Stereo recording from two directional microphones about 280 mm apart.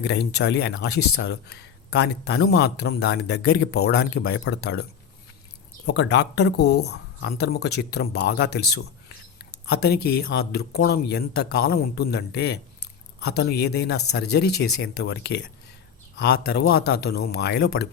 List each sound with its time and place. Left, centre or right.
0.0 s speech: left